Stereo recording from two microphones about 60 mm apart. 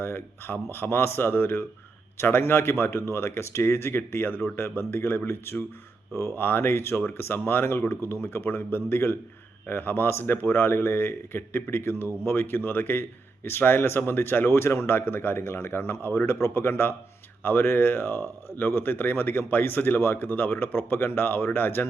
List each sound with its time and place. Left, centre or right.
0.0 s speech: left